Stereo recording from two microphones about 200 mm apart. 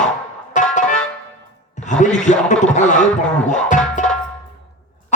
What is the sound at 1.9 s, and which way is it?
Speech, 35° left (ahead or behind).